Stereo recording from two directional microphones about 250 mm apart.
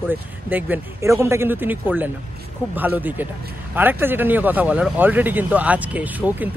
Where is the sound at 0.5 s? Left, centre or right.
Centre.